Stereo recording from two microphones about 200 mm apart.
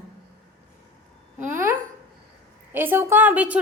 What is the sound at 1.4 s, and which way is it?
Speech, 40° right (ahead or behind).